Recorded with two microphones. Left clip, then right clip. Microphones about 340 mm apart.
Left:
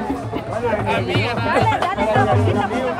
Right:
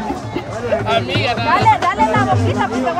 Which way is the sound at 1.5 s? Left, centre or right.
Right.